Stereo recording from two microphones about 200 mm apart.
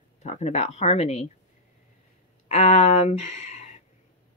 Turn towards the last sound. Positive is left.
turn(degrees=35)  # may be behind; listen again after turning